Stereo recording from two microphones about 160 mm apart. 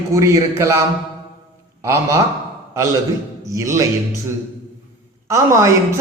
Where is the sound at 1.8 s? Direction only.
15° right (ahead or behind).